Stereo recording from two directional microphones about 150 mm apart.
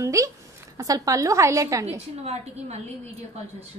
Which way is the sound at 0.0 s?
20° right (ahead or behind).